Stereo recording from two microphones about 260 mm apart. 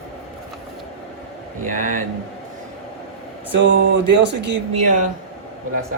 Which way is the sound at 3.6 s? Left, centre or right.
Right.